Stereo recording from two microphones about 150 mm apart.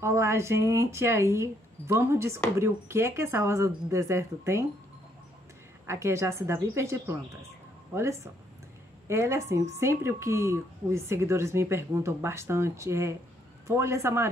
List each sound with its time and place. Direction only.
0.0 s speech: 20° right (ahead or behind)
5.9 s a woman's voice: 20° right (ahead or behind)